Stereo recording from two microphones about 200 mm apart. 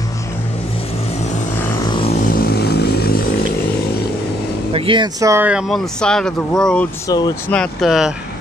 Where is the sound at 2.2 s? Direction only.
50° left (ahead or behind).